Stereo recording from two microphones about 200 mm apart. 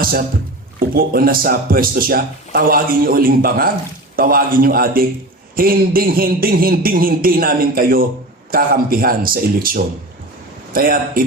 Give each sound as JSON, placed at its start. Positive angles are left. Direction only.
{"t": 0.0, "sound": "speech", "side_deg": -45}